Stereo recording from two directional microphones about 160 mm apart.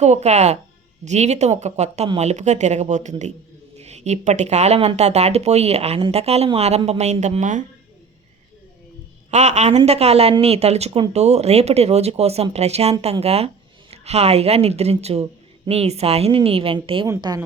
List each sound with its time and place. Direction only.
0.0 s speech: 45° right (ahead or behind)
9.3 s a woman's voice: 45° right (ahead or behind); by 17.4 s 25° right (ahead or behind)